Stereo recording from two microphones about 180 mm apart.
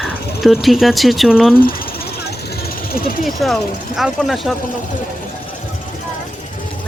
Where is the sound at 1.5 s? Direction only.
55° left (ahead or behind).